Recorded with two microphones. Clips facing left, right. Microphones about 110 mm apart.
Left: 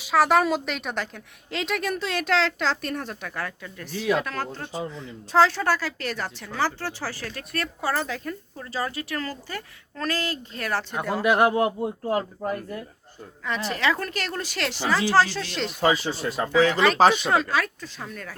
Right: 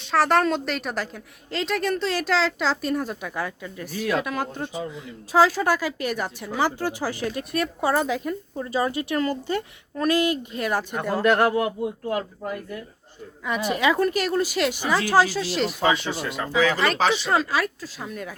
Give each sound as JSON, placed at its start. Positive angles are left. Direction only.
{"t": 0.0, "sound": "a woman's voice", "side_deg": 0}
{"t": 11.2, "sound": "speech", "side_deg": 15}
{"t": 11.5, "sound": "speech", "side_deg": 30}
{"t": 13.4, "sound": "speech", "side_deg": -10}
{"t": 16.4, "sound": "speech", "side_deg": 35}
{"t": 16.7, "sound": "a woman's voice", "side_deg": 0}